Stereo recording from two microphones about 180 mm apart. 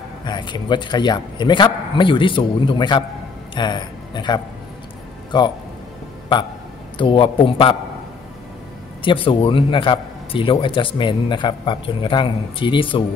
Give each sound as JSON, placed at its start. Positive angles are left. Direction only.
{"t": 0.2, "sound": "a man's voice", "side_deg": 25}
{"t": 7.0, "sound": "a man's voice", "side_deg": 30}
{"t": 9.0, "sound": "a man's voice", "side_deg": 30}